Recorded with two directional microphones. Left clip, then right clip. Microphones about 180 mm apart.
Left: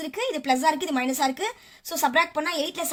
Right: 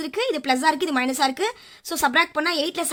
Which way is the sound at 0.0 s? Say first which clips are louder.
Right 4 dB; 35° right (ahead or behind).